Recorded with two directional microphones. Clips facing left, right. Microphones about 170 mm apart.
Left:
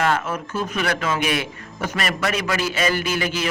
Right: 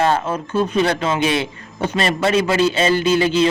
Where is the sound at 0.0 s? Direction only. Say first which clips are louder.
Right 4 dB; 30° right (ahead or behind).